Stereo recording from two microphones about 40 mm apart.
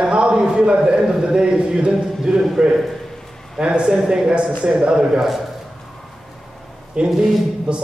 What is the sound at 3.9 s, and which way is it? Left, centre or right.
Speech, centre.